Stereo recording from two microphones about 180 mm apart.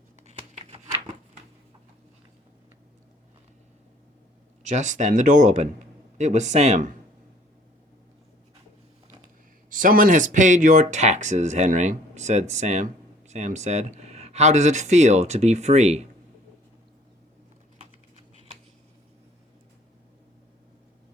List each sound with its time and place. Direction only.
0.3 s tearing: 35° right (ahead or behind)
4.7 s speech: 40° right (ahead or behind)
9.6 s speech: 50° right (ahead or behind)